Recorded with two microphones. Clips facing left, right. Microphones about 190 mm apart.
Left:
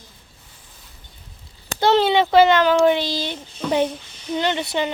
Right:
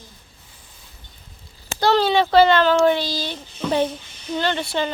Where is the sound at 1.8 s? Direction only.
20° left (ahead or behind).